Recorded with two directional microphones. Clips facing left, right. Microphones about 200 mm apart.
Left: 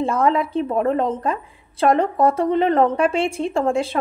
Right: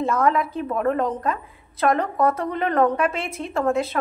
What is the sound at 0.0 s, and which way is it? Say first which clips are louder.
A woman's voice: left 2 dB; 30° left (ahead or behind).